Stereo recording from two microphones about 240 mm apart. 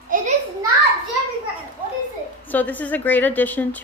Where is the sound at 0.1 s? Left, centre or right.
Right.